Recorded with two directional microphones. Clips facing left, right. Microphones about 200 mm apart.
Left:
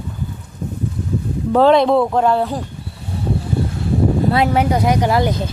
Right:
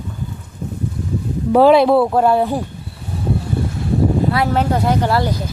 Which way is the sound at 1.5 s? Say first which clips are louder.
Right 2 dB; 10° right (ahead or behind).